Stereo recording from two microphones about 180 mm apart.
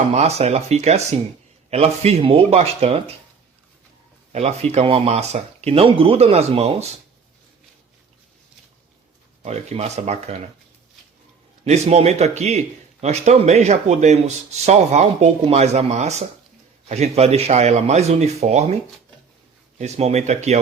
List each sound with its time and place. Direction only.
0.1 s speech: 35° right (ahead or behind)
4.3 s speech: 35° right (ahead or behind)
9.4 s speech: 35° right (ahead or behind)
11.6 s speech: 35° right (ahead or behind)
19.8 s speech: 35° right (ahead or behind)